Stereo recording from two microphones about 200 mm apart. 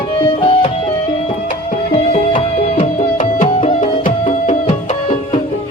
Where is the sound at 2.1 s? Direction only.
30° left (ahead or behind).